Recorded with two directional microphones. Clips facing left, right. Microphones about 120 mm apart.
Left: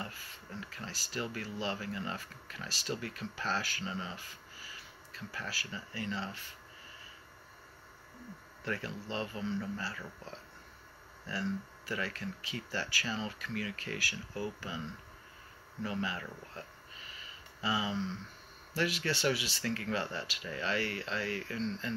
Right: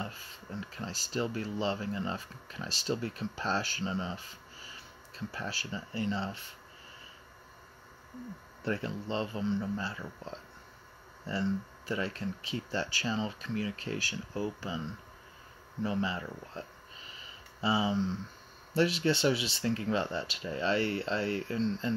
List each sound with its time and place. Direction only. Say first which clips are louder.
0.0 s speech: right 3 dB; 25° right (ahead or behind)
8.6 s speech: right 5 dB; 25° right (ahead or behind)
15.8 s speech: right 4 dB; 25° right (ahead or behind)
17.2 s a sound: right 5 dB; 30° right (ahead or behind)
18.8 s speech: right 6 dB; 30° right (ahead or behind)